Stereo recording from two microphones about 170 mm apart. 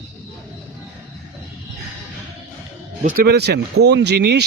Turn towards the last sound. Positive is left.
turn(degrees=-80)